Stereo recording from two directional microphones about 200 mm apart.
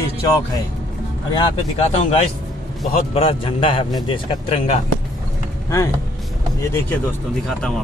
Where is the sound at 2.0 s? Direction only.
30° left (ahead or behind).